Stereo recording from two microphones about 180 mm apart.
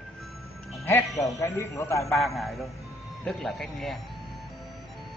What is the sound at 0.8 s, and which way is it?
Speech, 15° left (ahead or behind).